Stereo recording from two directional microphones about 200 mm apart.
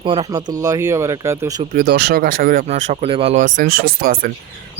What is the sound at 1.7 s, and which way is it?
Speech, 50° right (ahead or behind).